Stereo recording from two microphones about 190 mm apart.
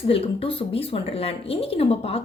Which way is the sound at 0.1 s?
30° left (ahead or behind).